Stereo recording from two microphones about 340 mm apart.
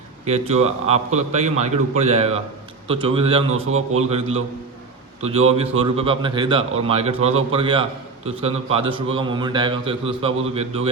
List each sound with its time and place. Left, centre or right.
0.3 s a man's voice: centre